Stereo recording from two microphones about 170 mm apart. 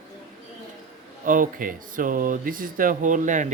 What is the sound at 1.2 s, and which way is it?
Speech, 55° right (ahead or behind).